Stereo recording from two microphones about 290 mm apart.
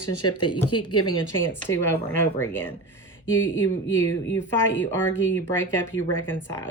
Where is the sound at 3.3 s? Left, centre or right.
Left.